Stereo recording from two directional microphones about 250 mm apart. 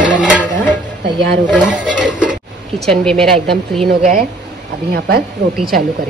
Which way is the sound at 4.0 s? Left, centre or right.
Right.